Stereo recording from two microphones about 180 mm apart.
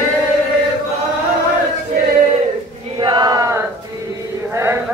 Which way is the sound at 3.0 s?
25° right (ahead or behind).